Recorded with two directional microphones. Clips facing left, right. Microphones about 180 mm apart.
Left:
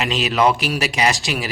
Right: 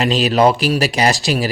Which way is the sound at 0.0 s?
35° right (ahead or behind).